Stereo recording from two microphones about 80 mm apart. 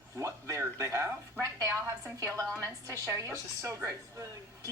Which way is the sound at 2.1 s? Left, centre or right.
Right.